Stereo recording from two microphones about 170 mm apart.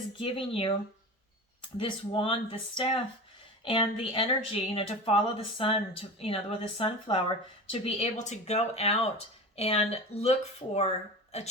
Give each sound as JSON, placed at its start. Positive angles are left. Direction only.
{"t": 0.2, "sound": "speech", "side_deg": 30}
{"t": 1.8, "sound": "speech", "side_deg": 30}